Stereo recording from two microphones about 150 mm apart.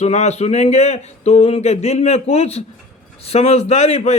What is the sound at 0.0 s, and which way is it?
A man's voice, 50° left (ahead or behind).